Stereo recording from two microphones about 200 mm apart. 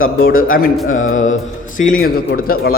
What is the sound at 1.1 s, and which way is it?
Mantra, 40° left (ahead or behind).